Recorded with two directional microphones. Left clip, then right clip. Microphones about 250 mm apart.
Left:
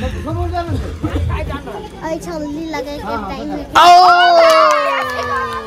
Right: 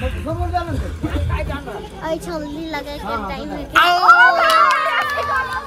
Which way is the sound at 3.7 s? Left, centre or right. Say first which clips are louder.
Left 7 dB; centre.